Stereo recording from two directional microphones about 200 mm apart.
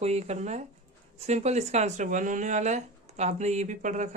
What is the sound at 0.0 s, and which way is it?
Speech, 35° right (ahead or behind).